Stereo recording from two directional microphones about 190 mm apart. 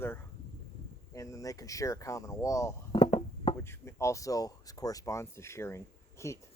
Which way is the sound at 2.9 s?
30° left (ahead or behind).